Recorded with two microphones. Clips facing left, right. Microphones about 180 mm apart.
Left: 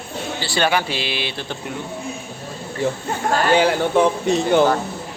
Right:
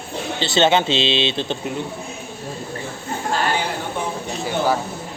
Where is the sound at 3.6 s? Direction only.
90° left.